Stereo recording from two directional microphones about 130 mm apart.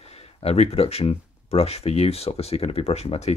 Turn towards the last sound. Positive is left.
turn(degrees=50)  # may be behind; listen again after turning